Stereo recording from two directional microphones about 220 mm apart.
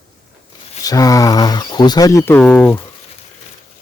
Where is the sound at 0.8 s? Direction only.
15° left (ahead or behind).